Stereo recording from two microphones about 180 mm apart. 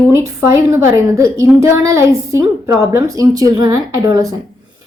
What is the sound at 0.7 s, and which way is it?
A woman's voice, 15° right (ahead or behind).